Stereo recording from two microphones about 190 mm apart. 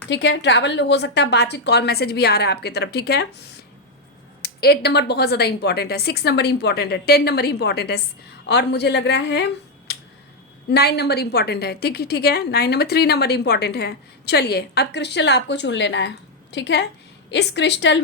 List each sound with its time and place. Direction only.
0.1 s a woman's voice: 70° left (ahead or behind)
4.4 s a woman's voice: 55° left (ahead or behind)